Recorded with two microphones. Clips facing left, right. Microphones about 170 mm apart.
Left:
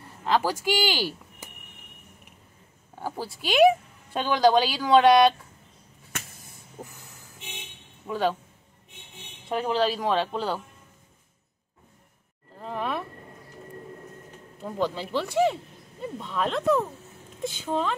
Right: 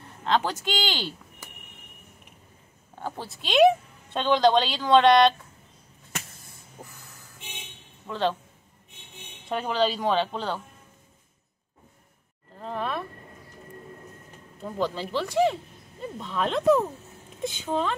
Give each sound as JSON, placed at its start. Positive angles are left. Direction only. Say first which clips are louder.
{"t": 0.2, "sound": "speech", "louder": "left 1 dB", "side_deg": 5}
{"t": 3.0, "sound": "a woman's voice", "louder": "left 2 dB", "side_deg": 5}
{"t": 6.4, "sound": "vehicle", "louder": "left 3 dB", "side_deg": 15}
{"t": 8.1, "sound": "a woman's voice", "louder": "left 1 dB", "side_deg": 10}
{"t": 9.5, "sound": "speech", "louder": "left 1 dB", "side_deg": 0}
{"t": 12.5, "sound": "a sound", "louder": "even", "side_deg": 5}
{"t": 14.8, "sound": "a woman's voice", "louder": "even", "side_deg": 10}